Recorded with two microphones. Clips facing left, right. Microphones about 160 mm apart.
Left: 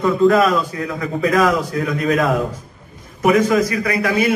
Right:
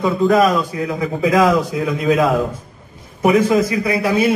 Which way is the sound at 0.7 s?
25° right (ahead or behind).